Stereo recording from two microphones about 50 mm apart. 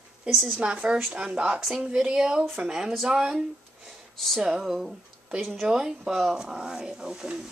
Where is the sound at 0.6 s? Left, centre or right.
Right.